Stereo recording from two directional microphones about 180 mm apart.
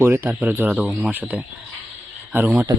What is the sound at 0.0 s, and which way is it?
Speech, 10° right (ahead or behind).